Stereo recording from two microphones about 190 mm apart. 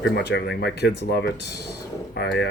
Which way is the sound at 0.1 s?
60° left (ahead or behind).